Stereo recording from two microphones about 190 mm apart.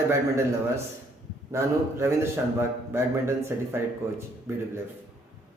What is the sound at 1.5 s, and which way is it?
A man's voice, 15° right (ahead or behind).